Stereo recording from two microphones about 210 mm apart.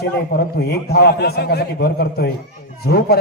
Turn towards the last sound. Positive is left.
turn(degrees=50)  # may be behind; listen again after turning